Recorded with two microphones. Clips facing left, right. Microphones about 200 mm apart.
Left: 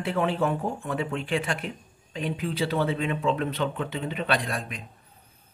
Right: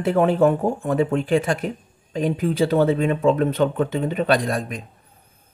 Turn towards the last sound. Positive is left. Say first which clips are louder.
# right 8 dB
turn(degrees=-40)  # may be behind; listen again after turning